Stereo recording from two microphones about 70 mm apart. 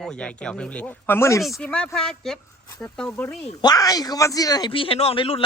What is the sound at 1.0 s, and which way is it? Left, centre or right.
Speech, left.